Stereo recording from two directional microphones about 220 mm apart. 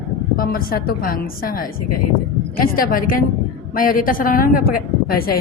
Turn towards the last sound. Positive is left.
turn(degrees=40)  # may be behind; listen again after turning